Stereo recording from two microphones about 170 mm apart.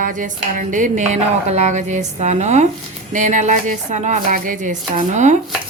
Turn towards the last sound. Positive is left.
turn(degrees=-45)  # may be behind; listen again after turning